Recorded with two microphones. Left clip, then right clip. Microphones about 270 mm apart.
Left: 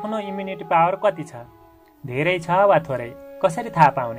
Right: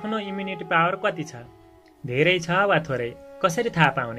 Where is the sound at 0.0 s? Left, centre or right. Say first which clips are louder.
Left 2 dB; left.